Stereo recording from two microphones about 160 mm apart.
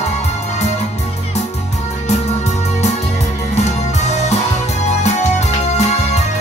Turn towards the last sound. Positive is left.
turn(degrees=45)  # may be behind; listen again after turning